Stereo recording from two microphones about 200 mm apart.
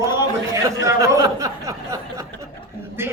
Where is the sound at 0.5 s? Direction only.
15° right (ahead or behind).